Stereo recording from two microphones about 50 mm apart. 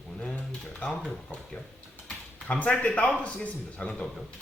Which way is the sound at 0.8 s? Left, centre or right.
Left.